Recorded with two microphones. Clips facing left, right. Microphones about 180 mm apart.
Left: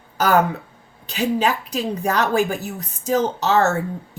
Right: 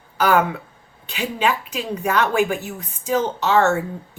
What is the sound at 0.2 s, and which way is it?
A woman's voice, 40° left (ahead or behind).